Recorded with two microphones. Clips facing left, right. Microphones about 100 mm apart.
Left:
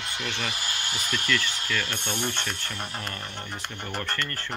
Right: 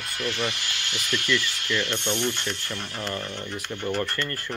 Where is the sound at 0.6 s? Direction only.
40° left (ahead or behind).